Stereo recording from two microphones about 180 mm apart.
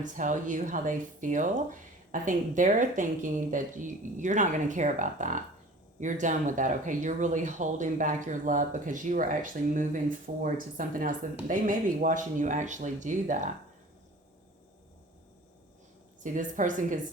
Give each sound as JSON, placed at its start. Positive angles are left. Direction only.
{"t": 0.0, "sound": "speech", "side_deg": -45}
{"t": 16.2, "sound": "speech", "side_deg": -45}